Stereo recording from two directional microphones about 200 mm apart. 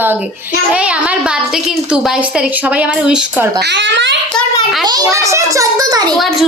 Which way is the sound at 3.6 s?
60° right (ahead or behind).